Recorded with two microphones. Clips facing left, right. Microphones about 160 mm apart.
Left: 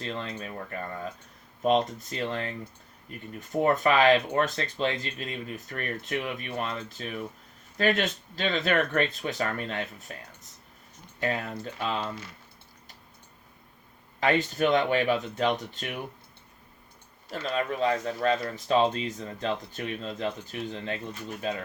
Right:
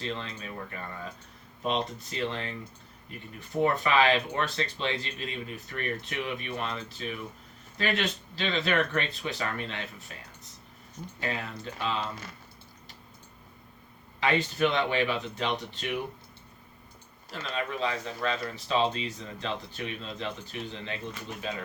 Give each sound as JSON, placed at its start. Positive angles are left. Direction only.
{"t": 0.0, "sound": "speech", "side_deg": 45}
{"t": 11.2, "sound": "speech", "side_deg": 45}
{"t": 14.2, "sound": "speech", "side_deg": 45}
{"t": 17.3, "sound": "speech", "side_deg": 45}